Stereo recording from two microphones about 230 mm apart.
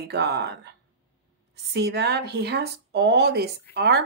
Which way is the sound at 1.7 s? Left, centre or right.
Right.